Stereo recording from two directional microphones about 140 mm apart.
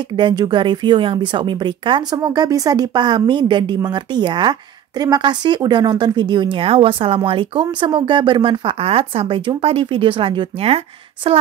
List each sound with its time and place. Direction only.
0.1 s speech: 30° right (ahead or behind)